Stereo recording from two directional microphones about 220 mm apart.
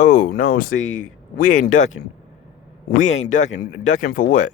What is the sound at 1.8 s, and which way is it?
Speech, 60° left (ahead or behind).